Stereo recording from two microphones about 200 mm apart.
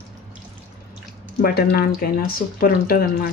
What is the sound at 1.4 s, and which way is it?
Speech, 50° left (ahead or behind).